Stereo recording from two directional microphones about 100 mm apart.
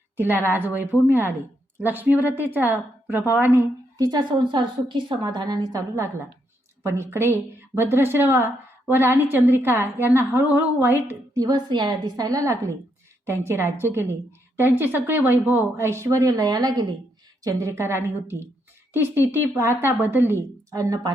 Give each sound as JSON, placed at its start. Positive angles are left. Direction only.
{"t": 0.2, "sound": "a woman's voice", "side_deg": -20}
{"t": 3.9, "sound": "a woman's voice", "side_deg": -45}
{"t": 11.3, "sound": "a woman's voice", "side_deg": -45}
{"t": 17.4, "sound": "a woman's voice", "side_deg": -30}